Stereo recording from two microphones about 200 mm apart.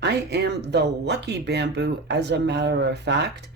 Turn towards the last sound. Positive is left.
turn(degrees=-60)  # may be behind; listen again after turning